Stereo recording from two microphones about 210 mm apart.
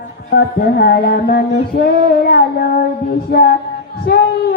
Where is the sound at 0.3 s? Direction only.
50° left (ahead or behind).